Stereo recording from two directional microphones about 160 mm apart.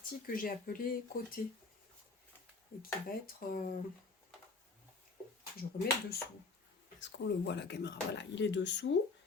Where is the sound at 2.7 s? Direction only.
75° left (ahead or behind).